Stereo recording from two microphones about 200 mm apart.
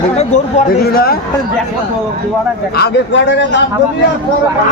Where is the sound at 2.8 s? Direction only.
65° left (ahead or behind).